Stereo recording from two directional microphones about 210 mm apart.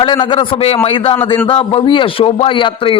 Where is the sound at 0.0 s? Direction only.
20° left (ahead or behind).